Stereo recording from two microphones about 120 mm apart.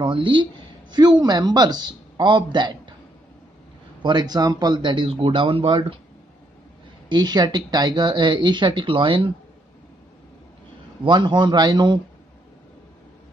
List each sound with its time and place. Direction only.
0.0 s speech: 40° right (ahead or behind)
4.0 s speech: 35° right (ahead or behind)
7.1 s speech: 35° right (ahead or behind)
11.1 s speech: 40° right (ahead or behind)